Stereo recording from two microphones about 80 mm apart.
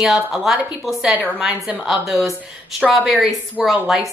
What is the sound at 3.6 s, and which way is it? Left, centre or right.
Speech, centre.